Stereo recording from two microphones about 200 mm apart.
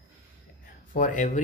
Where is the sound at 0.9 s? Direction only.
40° left (ahead or behind).